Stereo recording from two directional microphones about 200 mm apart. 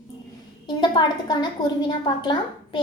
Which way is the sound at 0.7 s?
20° left (ahead or behind).